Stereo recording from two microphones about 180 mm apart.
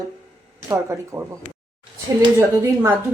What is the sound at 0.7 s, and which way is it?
Speech, 15° right (ahead or behind).